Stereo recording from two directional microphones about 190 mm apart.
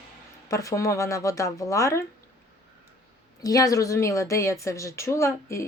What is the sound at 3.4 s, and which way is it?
Speech, 20° left (ahead or behind).